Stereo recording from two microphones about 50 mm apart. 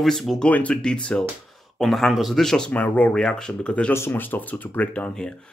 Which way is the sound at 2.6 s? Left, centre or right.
Left.